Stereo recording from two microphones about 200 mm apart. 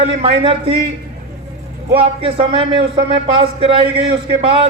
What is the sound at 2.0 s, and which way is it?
A man's voice, 25° right (ahead or behind).